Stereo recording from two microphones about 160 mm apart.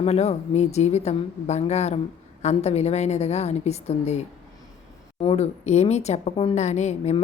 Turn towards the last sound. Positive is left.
turn(degrees=45)  # may be behind; listen again after turning